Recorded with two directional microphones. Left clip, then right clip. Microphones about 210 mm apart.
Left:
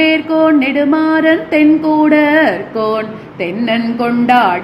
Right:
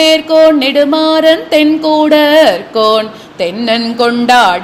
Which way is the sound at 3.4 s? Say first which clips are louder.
Right 4 dB; 50° right (ahead or behind).